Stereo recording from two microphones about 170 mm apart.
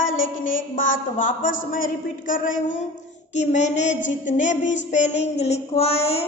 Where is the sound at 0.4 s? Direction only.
50° left (ahead or behind).